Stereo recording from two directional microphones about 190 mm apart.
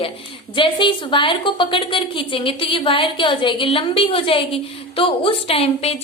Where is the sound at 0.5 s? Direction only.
25° left (ahead or behind).